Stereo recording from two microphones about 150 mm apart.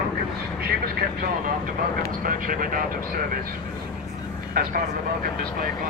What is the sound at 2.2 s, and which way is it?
Vehicle, 70° right (ahead or behind).